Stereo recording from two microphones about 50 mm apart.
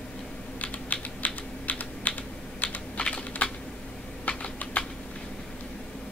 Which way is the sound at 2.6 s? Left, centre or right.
Left.